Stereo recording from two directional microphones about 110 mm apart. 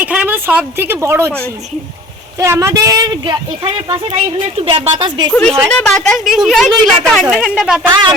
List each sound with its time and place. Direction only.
0.0 s speech: 15° right (ahead or behind)
2.4 s a woman's voice: 25° right (ahead or behind); by 5.3 s 45° right (ahead or behind)
5.3 s a woman's voice: 10° left (ahead or behind)
7.3 s a woman's voice: 10° right (ahead or behind)